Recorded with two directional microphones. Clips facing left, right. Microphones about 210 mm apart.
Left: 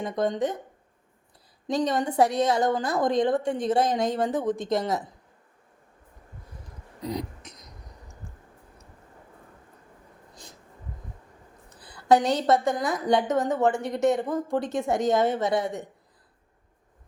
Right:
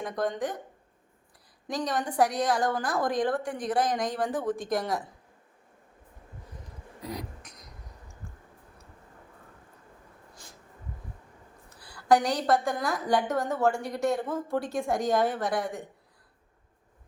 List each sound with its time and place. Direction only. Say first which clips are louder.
0.0 s a woman's voice: left 4 dB; 25° left (ahead or behind)
1.6 s a woman's voice: left 5 dB; 25° left (ahead or behind)
7.0 s throat clearing: left 6 dB; 20° left (ahead or behind)
11.7 s a sound: left 2 dB; 20° left (ahead or behind)
12.0 s a woman's voice: left 3 dB; 25° left (ahead or behind)